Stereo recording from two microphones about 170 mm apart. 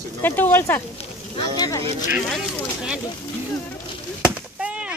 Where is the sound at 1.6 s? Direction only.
20° left (ahead or behind).